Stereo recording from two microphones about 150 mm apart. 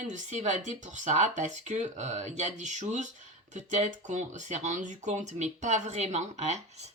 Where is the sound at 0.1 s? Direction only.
55° right (ahead or behind).